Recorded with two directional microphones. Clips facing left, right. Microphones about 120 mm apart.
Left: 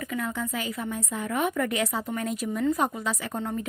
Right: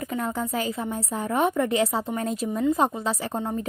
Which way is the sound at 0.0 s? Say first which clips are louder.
Right 3 dB; 35° right (ahead or behind).